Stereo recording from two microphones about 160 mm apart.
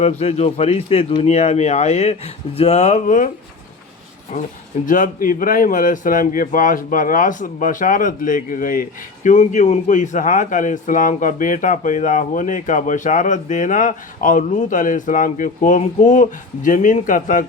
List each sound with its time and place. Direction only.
0.0 s speech: 40° left (ahead or behind)
4.3 s speech: 50° left (ahead or behind)